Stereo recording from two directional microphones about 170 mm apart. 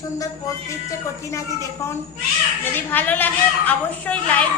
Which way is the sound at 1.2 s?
15° left (ahead or behind).